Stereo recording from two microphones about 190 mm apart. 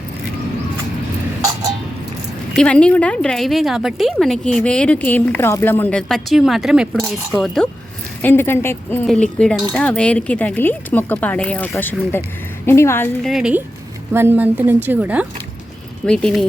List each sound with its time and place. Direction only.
2.5 s a woman's voice: 5° left (ahead or behind)
13.2 s a woman's voice: 5° right (ahead or behind)
16.0 s a woman's voice: 5° left (ahead or behind)